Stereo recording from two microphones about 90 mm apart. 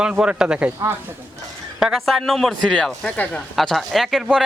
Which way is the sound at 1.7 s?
5° right (ahead or behind).